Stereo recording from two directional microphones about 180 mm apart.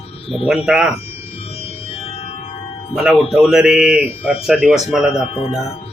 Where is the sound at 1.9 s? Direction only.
30° left (ahead or behind).